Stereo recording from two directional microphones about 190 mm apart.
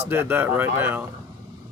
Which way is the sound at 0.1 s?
10° right (ahead or behind).